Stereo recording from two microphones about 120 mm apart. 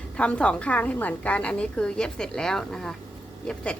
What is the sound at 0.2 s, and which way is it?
A woman's voice, 10° left (ahead or behind).